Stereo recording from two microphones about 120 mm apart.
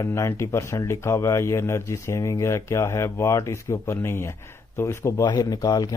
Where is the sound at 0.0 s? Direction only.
25° left (ahead or behind).